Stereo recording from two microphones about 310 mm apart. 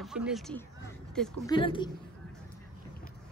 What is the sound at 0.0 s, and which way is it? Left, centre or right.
Speech, centre.